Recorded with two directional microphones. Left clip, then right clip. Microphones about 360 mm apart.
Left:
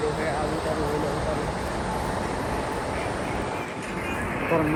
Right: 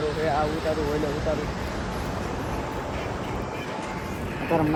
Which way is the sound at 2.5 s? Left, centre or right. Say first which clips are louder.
Left 3 dB; left.